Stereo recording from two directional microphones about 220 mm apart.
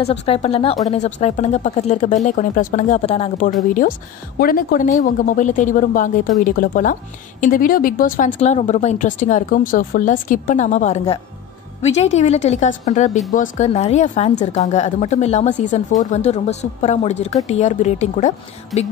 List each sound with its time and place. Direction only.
0.0 s a woman's voice: 30° left (ahead or behind)
18.7 s music: centre (ahead or behind)